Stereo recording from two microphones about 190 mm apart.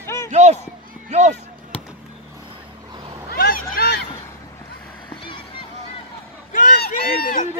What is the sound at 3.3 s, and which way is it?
Vehicle, 50° left (ahead or behind).